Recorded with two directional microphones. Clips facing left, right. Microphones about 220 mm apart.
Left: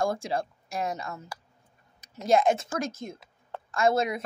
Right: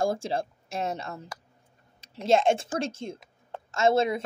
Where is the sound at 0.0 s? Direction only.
30° right (ahead or behind).